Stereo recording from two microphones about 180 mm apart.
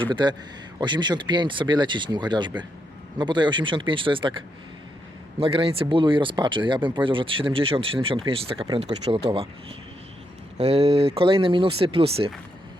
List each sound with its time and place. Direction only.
0.0 s speech: 25° right (ahead or behind)
10.6 s speech: 35° right (ahead or behind)